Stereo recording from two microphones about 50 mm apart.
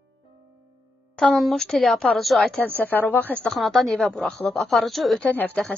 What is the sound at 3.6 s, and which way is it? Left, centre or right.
Speech, centre.